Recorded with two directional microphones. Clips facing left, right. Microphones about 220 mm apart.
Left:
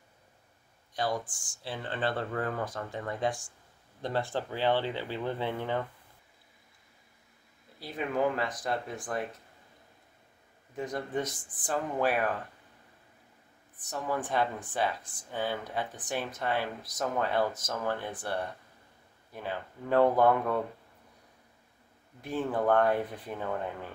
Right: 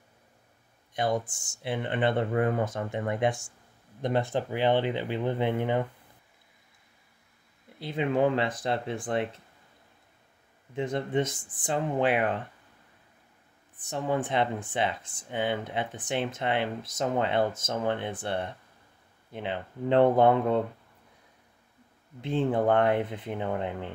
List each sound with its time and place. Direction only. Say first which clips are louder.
0.9 s speech: right 4 dB; 20° right (ahead or behind)
7.8 s speech: right 4 dB; 25° right (ahead or behind)
10.8 s speech: right 5 dB; 25° right (ahead or behind)
13.8 s speech: right 4 dB; 25° right (ahead or behind)
22.2 s speech: right 4 dB; 25° right (ahead or behind)